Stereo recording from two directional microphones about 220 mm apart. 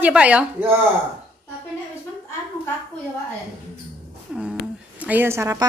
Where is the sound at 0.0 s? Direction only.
5° right (ahead or behind).